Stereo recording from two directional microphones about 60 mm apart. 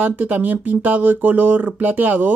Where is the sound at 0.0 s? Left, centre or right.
Right.